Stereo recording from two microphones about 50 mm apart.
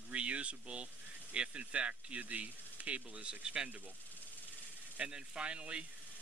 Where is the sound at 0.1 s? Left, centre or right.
Right.